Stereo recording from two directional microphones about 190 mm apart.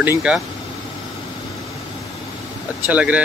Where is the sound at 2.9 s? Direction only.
5° right (ahead or behind).